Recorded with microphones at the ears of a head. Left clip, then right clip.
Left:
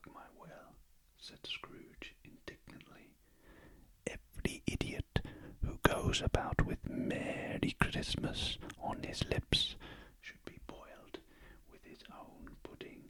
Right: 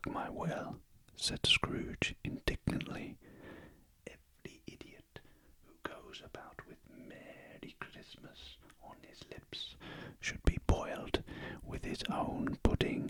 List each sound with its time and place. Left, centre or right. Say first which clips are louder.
0.0 s whispering: right 15 dB; right
4.0 s whispering: left 10 dB; left
10.0 s whispering: right 12 dB; right